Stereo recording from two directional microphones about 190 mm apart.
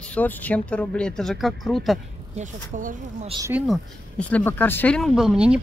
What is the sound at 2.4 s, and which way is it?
Speech, 40° right (ahead or behind).